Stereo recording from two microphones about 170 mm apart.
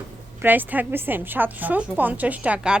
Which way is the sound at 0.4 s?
10° right (ahead or behind).